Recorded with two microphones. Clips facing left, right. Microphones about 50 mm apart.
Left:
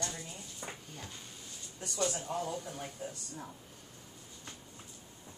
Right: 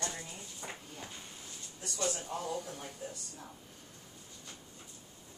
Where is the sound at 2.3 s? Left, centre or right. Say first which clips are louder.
Left 1 dB; left.